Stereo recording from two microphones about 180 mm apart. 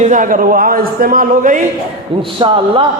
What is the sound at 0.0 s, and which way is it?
A man's voice, 45° right (ahead or behind).